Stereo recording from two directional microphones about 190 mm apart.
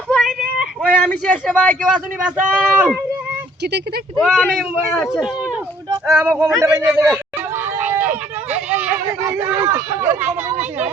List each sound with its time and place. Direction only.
0.1 s a sound: centre (ahead or behind)
2.6 s speech: 5° right (ahead or behind)
3.6 s speech: 60° right (ahead or behind)
4.2 s speech: centre (ahead or behind)
7.8 s a sound: 10° right (ahead or behind)
8.5 s speech: 10° right (ahead or behind)